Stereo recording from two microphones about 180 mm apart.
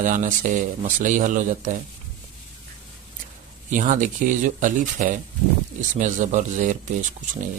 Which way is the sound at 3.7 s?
45° right (ahead or behind).